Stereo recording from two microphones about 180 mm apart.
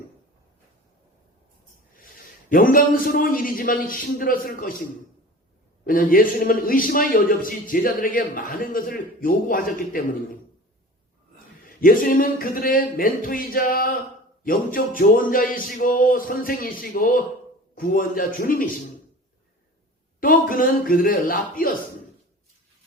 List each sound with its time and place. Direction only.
2.5 s a man's voice: 55° left (ahead or behind)
5.8 s a man's voice: 50° left (ahead or behind)
11.6 s a man's voice: 50° left (ahead or behind)
20.1 s a man's voice: 50° left (ahead or behind)